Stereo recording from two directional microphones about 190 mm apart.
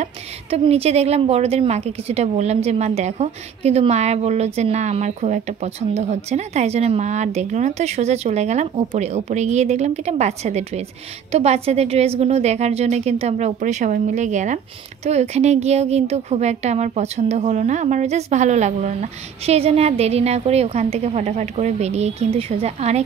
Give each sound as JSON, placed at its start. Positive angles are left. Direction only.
{"t": 0.0, "sound": "a woman's voice", "side_deg": -30}